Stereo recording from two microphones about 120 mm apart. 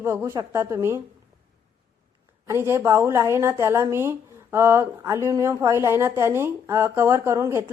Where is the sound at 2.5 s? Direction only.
20° right (ahead or behind).